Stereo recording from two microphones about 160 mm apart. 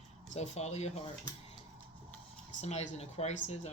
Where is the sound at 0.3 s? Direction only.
45° left (ahead or behind).